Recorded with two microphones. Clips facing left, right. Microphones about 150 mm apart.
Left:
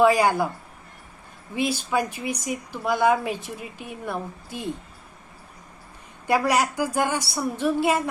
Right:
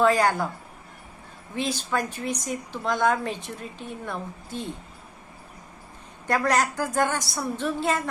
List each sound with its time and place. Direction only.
0.0 s speech: 10° left (ahead or behind)
1.5 s speech: 10° left (ahead or behind)
6.2 s speech: 10° left (ahead or behind)